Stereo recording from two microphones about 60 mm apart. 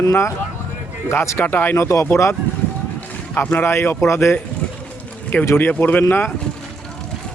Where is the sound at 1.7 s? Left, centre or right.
Left.